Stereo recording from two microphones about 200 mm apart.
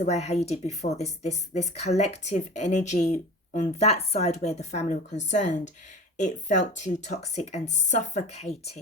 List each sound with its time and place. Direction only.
0.0 s speech: 35° left (ahead or behind)